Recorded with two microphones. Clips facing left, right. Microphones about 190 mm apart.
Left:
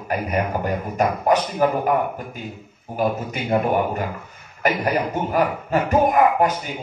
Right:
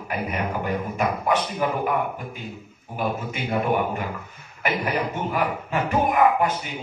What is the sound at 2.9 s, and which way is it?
Speech, 40° left (ahead or behind).